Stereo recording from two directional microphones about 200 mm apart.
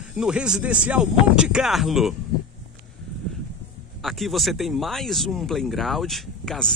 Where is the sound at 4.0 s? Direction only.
Centre (ahead or behind).